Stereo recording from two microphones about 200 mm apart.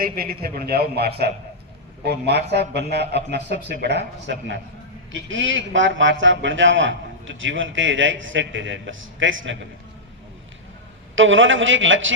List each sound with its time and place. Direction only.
0.0 s a man's voice: 50° right (ahead or behind)
5.1 s a man's voice: 70° right (ahead or behind)
11.1 s a man's voice: 75° right (ahead or behind)